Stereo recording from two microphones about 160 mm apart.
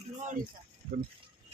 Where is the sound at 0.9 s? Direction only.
85° right.